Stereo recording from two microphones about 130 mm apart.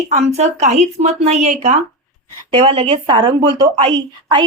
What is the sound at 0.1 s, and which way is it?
Speech, 60° right (ahead or behind).